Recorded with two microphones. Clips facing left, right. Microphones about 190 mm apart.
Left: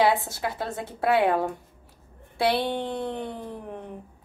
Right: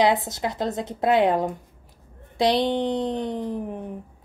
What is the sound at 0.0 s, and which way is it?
Speech, 20° right (ahead or behind).